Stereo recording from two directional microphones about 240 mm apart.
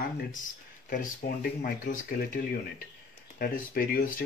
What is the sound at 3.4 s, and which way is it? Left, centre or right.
Speech, left.